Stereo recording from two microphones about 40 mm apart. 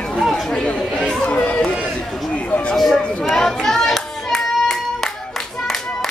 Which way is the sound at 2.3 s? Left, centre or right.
Left.